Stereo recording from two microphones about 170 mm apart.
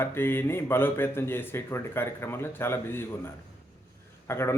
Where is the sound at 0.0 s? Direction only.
15° left (ahead or behind).